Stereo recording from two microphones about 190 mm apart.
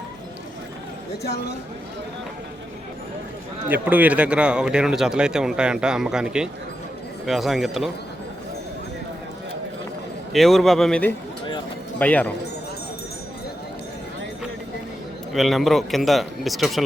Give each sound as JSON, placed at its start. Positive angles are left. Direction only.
{"t": 1.2, "sound": "speech", "side_deg": 60}
{"t": 3.7, "sound": "speech", "side_deg": -10}
{"t": 10.3, "sound": "a man's voice", "side_deg": 0}
{"t": 15.3, "sound": "speech", "side_deg": 0}